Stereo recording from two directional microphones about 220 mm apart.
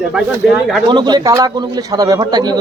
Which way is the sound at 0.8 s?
20° right (ahead or behind).